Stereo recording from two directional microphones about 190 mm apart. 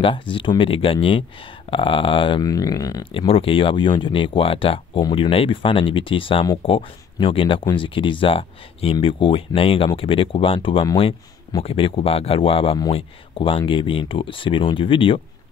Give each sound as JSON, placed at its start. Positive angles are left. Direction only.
{"t": 0.0, "sound": "speech", "side_deg": 25}